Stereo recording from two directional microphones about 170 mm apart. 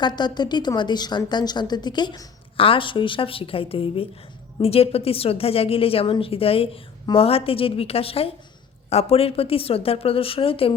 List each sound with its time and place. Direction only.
0.0 s a woman's voice: 25° left (ahead or behind)